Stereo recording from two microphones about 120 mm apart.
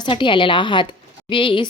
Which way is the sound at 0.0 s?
45° left (ahead or behind).